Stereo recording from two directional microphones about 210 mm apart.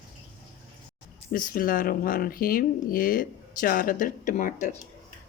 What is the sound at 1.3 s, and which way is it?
Speech, 45° left (ahead or behind).